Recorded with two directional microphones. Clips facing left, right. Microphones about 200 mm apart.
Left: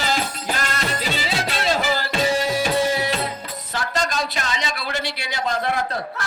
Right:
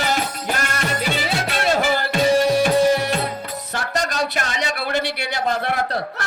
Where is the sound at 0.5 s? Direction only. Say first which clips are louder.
Right 2 dB; 55° right (ahead or behind).